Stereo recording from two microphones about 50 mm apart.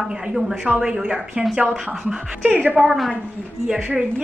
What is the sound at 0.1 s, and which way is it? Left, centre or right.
A woman's voice, centre.